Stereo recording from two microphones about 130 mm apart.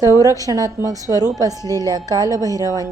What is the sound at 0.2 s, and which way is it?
A woman's voice, 25° right (ahead or behind).